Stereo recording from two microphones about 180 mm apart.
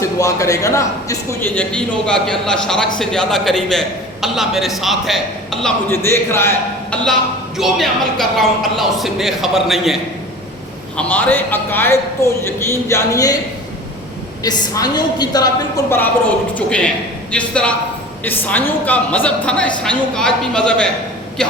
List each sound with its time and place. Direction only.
0.0 s a man's voice: 15° left (ahead or behind); by 5.7 s centre (ahead or behind)
5.9 s a man's voice: 15° left (ahead or behind)
7.6 s a man's voice: centre (ahead or behind); by 13.4 s 20° left (ahead or behind)
14.4 s a woman's voice: 20° left (ahead or behind); by 20.9 s 5° left (ahead or behind)